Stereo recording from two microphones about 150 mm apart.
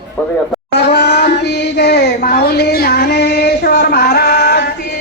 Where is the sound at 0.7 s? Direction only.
90° left.